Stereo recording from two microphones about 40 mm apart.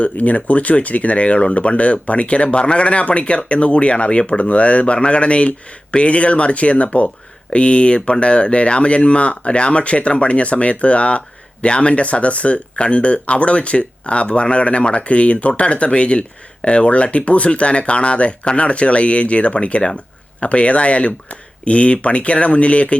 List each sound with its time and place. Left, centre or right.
0.0 s speech: left